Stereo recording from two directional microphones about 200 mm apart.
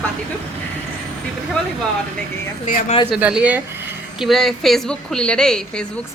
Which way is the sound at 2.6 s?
40° left (ahead or behind).